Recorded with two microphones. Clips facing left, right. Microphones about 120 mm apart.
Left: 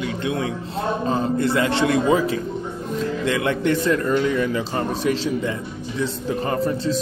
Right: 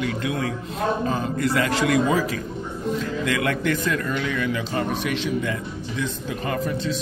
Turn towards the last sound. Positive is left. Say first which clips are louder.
# left 3 dB
turn(degrees=35)  # may be behind; listen again after turning